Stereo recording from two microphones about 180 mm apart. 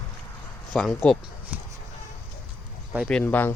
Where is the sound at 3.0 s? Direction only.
5° left (ahead or behind).